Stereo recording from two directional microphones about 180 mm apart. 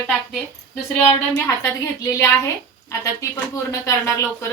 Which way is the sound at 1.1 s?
15° left (ahead or behind).